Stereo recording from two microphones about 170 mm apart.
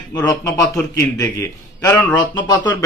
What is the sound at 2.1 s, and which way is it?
Speech, 25° left (ahead or behind).